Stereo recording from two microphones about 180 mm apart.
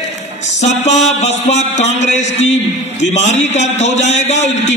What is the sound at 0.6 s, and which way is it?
A man's voice, 40° left (ahead or behind).